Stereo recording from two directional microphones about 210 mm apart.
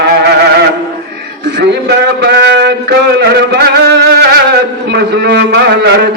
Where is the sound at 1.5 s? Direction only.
55° right (ahead or behind).